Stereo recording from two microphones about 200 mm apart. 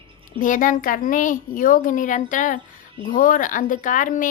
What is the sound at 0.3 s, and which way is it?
A child's voice, 40° left (ahead or behind).